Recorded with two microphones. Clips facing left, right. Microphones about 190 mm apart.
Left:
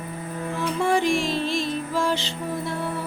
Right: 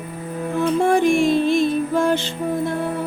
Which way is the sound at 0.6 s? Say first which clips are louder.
Right 6 dB; 55° right (ahead or behind).